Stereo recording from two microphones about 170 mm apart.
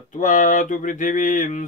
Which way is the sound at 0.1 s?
50° left (ahead or behind).